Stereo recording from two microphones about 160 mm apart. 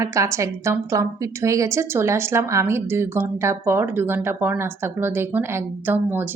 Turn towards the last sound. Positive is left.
turn(degrees=-15)  # may be behind; listen again after turning